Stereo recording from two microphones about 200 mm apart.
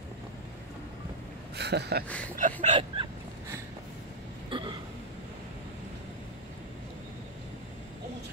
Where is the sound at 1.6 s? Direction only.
55° right (ahead or behind).